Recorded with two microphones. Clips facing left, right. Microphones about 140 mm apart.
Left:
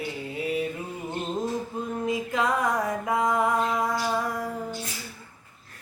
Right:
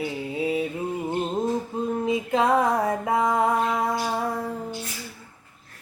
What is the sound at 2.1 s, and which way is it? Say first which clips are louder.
Music: right 4 dB; 25° right (ahead or behind).